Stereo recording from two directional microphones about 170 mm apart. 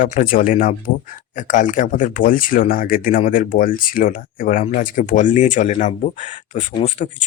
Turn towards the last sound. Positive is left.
turn(degrees=45)  # may be behind; listen again after turning